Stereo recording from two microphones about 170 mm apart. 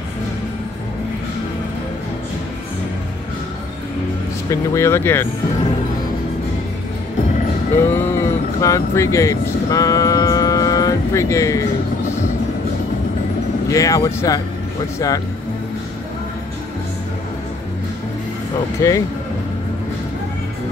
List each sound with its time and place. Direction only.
4.5 s speech: 15° left (ahead or behind)
7.7 s speech: 15° left (ahead or behind)
13.7 s speech: 20° left (ahead or behind)
18.8 s speech: 20° left (ahead or behind)